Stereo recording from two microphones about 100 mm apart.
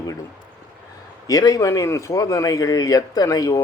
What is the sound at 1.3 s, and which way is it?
Speech, 35° left (ahead or behind).